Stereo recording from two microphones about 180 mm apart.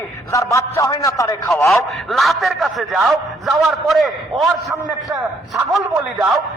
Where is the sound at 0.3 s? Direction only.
20° left (ahead or behind).